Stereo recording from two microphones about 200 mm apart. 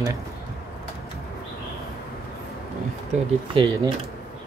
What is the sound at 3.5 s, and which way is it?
Speech, 25° right (ahead or behind).